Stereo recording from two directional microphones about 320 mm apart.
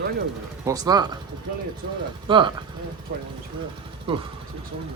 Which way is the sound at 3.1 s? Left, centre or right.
Right.